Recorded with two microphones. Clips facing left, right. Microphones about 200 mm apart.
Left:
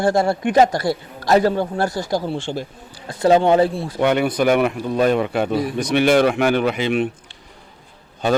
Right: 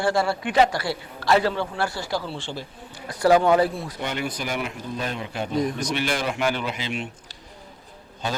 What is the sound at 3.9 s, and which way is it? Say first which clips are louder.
A man's voice: left 11 dB; 60° left (ahead or behind).